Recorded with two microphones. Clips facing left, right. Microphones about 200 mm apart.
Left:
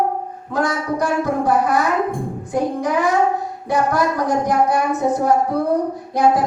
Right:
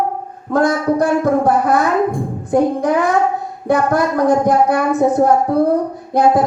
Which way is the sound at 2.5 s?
55° right (ahead or behind).